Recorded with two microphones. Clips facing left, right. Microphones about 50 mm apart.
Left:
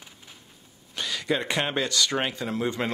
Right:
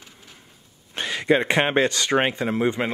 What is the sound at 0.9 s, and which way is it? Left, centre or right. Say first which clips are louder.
Speech: right 7 dB; right.